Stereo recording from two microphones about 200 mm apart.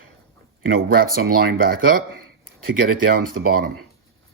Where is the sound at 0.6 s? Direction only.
45° right (ahead or behind).